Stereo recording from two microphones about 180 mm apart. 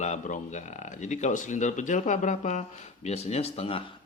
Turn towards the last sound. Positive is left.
turn(degrees=30)  # may be behind; listen again after turning